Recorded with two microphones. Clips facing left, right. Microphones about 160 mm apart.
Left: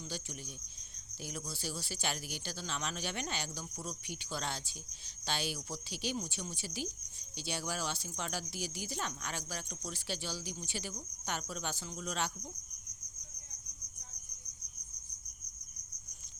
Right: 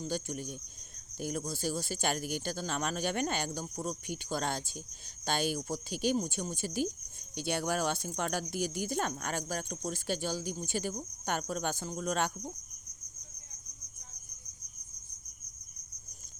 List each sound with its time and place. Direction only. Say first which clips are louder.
0.0 s speech: right 8 dB; 50° right (ahead or behind)